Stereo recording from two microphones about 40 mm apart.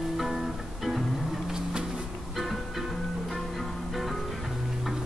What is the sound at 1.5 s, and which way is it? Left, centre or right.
Vehicle, centre.